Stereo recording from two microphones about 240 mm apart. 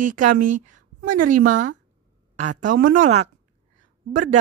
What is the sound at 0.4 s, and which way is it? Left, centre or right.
A woman's voice, right.